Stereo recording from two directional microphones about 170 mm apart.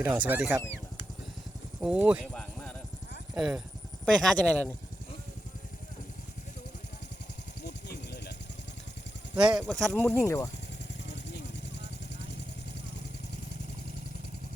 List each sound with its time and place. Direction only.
0.0 s speech: 10° right (ahead or behind)
1.8 s speech: 5° right (ahead or behind)
2.2 s a sound: 5° left (ahead or behind)
3.3 s speech: 5° right (ahead or behind)
7.6 s a sound: 75° left (ahead or behind)
9.3 s speech: 5° right (ahead or behind)
10.1 s speech: 15° left (ahead or behind)
11.1 s vehicle: 90° left